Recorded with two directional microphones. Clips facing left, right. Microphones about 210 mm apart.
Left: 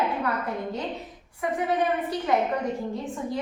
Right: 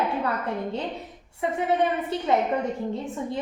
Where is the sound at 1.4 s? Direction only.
25° right (ahead or behind).